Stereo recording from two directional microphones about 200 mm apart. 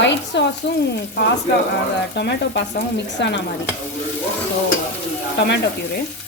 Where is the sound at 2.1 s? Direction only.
60° left (ahead or behind).